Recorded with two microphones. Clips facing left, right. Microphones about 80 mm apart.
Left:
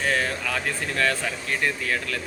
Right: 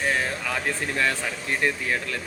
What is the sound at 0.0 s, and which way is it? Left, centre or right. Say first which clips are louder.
Speech: left 1 dB; centre.